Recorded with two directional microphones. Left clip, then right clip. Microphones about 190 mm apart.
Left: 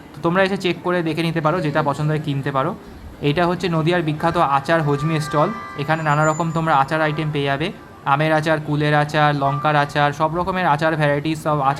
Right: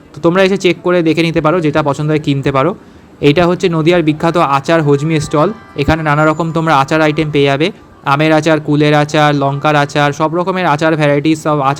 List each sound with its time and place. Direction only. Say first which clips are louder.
0.2 s speech: right 8 dB; 20° right (ahead or behind)